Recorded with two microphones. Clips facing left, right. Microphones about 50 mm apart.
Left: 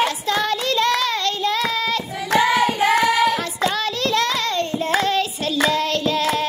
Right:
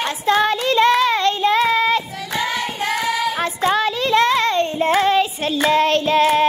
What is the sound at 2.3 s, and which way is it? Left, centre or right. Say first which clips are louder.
Hands: left 6 dB; left.